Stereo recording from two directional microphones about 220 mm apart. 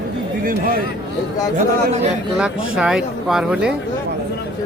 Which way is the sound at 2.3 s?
5° right (ahead or behind).